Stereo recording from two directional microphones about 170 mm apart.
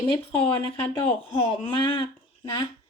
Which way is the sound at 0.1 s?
30° left (ahead or behind).